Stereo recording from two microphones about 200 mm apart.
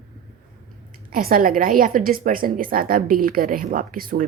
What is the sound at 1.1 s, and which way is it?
A woman's voice, 45° right (ahead or behind).